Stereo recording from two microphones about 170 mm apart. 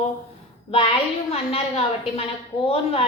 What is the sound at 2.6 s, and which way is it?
Speech, 35° left (ahead or behind).